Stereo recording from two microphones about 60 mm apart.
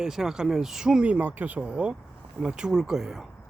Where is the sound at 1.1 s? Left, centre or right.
Right; by 3.3 s centre.